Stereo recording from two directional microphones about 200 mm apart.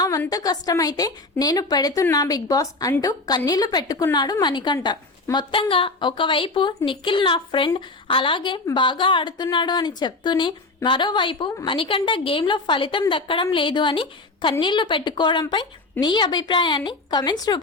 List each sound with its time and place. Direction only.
0.0 s a woman's voice: 15° left (ahead or behind)